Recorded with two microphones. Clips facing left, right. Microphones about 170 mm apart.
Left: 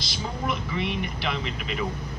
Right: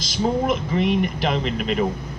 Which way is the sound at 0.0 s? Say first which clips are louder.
Right 10 dB; 45° right (ahead or behind).